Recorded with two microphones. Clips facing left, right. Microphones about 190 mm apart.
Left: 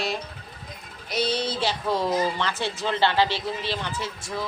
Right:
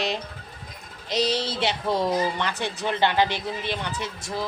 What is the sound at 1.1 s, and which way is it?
Speech, 90° right.